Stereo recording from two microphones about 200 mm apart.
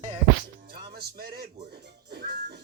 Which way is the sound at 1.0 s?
50° right (ahead or behind).